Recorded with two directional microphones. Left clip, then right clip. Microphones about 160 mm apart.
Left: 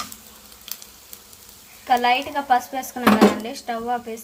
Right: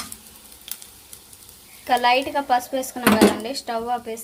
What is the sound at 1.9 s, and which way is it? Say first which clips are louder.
Speech: even; 35° right (ahead or behind).